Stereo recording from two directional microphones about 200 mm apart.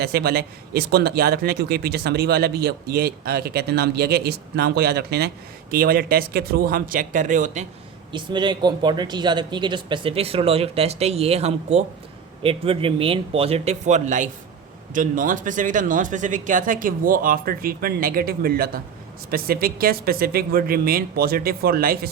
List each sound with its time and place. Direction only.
0.0 s speech: 50° right (ahead or behind)
8.1 s speech: 25° right (ahead or behind); by 22.1 s 50° right (ahead or behind)